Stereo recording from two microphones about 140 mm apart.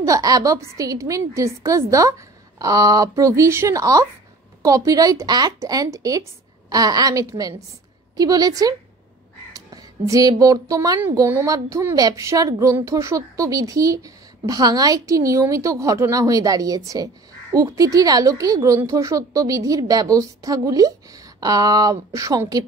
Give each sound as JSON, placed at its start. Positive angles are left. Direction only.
{"t": 0.0, "sound": "speech", "side_deg": -25}